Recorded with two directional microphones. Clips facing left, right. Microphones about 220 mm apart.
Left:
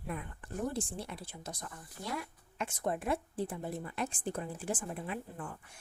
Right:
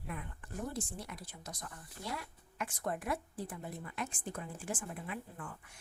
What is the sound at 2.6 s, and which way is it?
A woman's voice, 25° left (ahead or behind).